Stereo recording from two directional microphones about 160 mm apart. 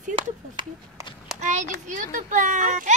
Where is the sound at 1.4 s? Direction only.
50° right (ahead or behind).